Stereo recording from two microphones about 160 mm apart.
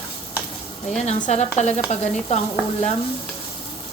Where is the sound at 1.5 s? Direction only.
45° left (ahead or behind).